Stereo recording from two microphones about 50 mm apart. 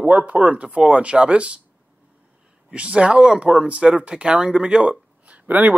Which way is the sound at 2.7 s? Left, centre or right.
Right.